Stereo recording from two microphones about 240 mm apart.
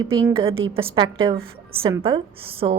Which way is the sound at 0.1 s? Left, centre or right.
Right.